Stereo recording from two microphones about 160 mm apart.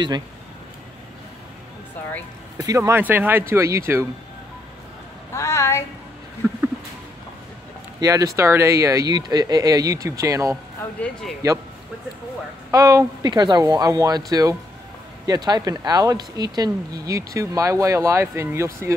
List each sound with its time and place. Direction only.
2.5 s speech: 20° right (ahead or behind)
5.3 s a sound: 15° left (ahead or behind)
6.4 s a sound: 15° right (ahead or behind)
8.0 s speech: 20° right (ahead or behind)
10.5 s speech: 5° left (ahead or behind)
12.7 s speech: 20° right (ahead or behind)